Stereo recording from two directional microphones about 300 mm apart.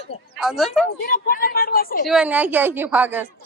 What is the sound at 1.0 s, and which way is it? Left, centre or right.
Speech, left.